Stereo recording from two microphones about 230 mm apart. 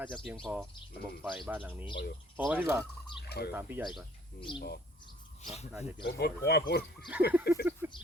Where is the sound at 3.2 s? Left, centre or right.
Left.